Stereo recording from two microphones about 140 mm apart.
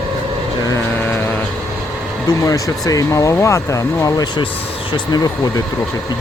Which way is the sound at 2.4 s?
25° left (ahead or behind).